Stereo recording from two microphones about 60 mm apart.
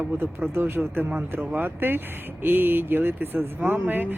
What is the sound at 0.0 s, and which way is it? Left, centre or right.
Speech, right.